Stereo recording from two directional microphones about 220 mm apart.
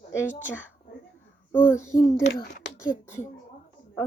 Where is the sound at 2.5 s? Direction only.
50° left (ahead or behind).